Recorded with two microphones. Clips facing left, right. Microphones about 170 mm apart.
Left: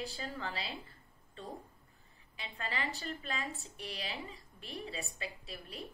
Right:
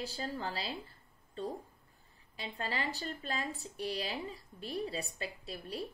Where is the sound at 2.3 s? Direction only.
35° right (ahead or behind).